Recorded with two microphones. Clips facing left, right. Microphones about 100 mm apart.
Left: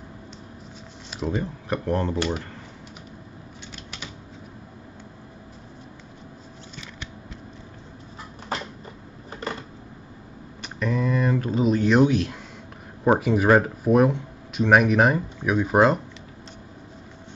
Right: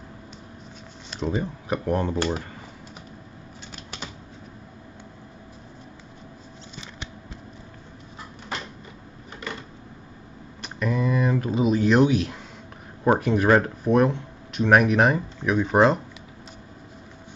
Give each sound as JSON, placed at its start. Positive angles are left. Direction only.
{"t": 1.1, "sound": "a sound", "side_deg": 0}
{"t": 1.4, "sound": "speech", "side_deg": -10}
{"t": 2.1, "sound": "speech", "side_deg": -35}
{"t": 3.7, "sound": "typing", "side_deg": -40}
{"t": 9.3, "sound": "a sound", "side_deg": 35}
{"t": 10.6, "sound": "speech", "side_deg": -5}